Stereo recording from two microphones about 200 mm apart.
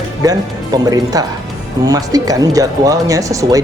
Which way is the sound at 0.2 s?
20° right (ahead or behind).